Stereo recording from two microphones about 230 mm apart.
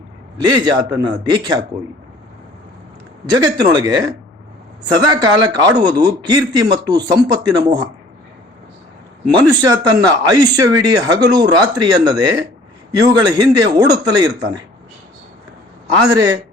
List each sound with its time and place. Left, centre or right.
0.3 s speech: centre
3.3 s speech: centre
5.1 s speech: centre
9.3 s speech: centre
16.0 s speech: centre